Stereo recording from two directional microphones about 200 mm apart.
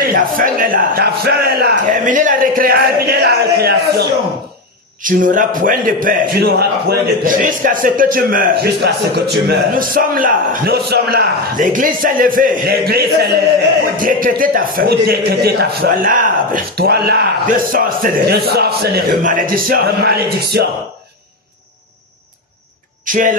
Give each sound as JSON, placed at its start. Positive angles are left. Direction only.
{"t": 0.0, "sound": "a man's voice", "side_deg": -45}
{"t": 5.0, "sound": "a man's voice", "side_deg": -40}
{"t": 23.0, "sound": "speech", "side_deg": -40}